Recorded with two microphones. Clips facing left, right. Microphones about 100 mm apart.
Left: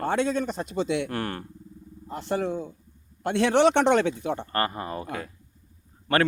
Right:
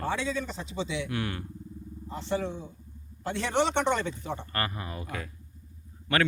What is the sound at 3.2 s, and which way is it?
A man's voice, 65° left (ahead or behind).